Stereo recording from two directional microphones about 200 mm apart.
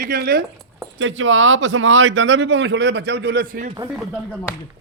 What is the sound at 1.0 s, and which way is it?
A man's voice, 75° right (ahead or behind).